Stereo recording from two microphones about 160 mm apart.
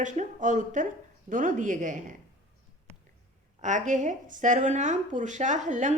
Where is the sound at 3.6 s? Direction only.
50° right (ahead or behind).